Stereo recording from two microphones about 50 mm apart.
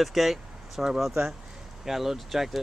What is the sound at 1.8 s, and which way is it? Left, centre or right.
Speech, centre.